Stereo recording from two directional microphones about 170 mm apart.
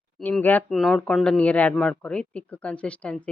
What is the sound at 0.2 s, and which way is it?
Speech, 10° left (ahead or behind).